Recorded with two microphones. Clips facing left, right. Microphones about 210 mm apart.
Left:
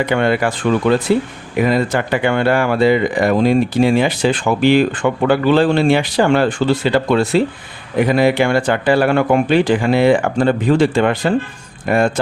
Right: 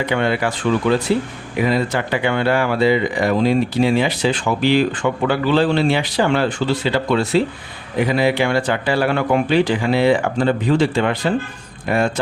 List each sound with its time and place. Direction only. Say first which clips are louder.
0.0 s speech: left 3 dB; 50° left (ahead or behind)